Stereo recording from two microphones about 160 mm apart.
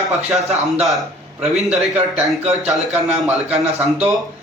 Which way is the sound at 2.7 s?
5° right (ahead or behind).